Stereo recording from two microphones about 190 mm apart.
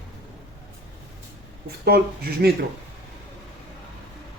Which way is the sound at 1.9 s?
55° right (ahead or behind).